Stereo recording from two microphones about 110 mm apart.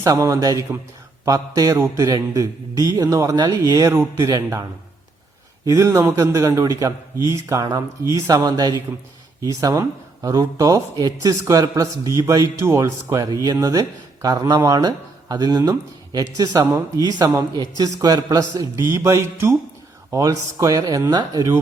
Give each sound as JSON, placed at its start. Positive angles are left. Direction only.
{"t": 0.0, "sound": "speech", "side_deg": -30}
{"t": 5.6, "sound": "speech", "side_deg": -25}